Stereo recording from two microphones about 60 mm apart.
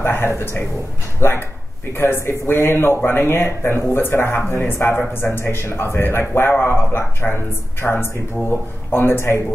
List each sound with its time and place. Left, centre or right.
0.0 s a man's voice: left